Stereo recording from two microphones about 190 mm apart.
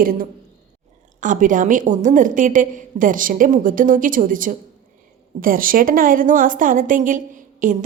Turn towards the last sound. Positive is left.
turn(degrees=-45)  # may be behind; listen again after turning